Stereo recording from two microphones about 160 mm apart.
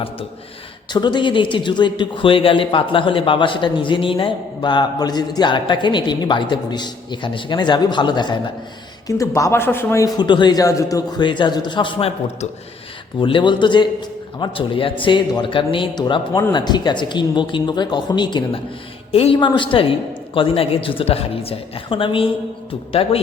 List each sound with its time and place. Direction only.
0.9 s speech: 30° left (ahead or behind)